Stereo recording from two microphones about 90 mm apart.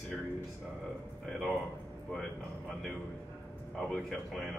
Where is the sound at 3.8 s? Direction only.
5° left (ahead or behind).